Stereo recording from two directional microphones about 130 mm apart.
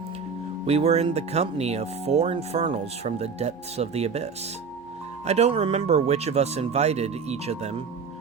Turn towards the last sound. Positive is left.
turn(degrees=-55)  # may be behind; listen again after turning